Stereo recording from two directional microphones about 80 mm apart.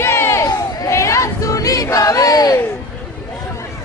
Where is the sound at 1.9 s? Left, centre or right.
Left.